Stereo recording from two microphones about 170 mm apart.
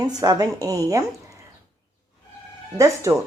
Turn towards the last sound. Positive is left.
turn(degrees=-20)  # may be behind; listen again after turning